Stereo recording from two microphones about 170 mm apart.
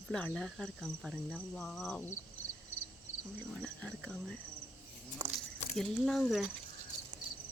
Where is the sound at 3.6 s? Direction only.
5° left (ahead or behind).